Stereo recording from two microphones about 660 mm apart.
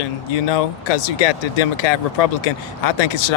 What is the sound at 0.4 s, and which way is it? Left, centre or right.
Speech, left.